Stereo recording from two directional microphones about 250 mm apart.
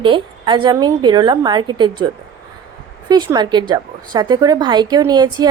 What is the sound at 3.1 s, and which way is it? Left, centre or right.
A woman's voice, centre.